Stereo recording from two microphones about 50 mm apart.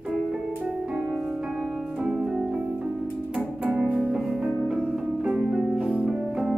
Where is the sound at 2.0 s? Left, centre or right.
Centre.